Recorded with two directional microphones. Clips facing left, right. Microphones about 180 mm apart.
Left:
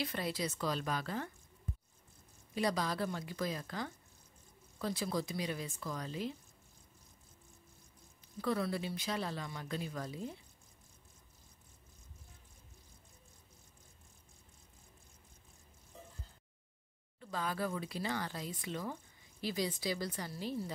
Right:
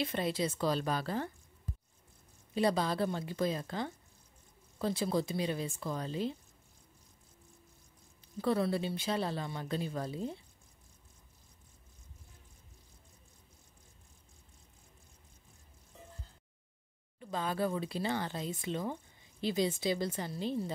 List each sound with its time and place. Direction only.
0.0 s a woman's voice: 25° right (ahead or behind)
2.5 s speech: 30° right (ahead or behind)
8.4 s speech: 30° right (ahead or behind)
17.2 s speech: 25° right (ahead or behind)